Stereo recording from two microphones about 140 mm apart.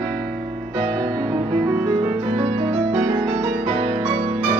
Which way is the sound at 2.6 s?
45° right (ahead or behind).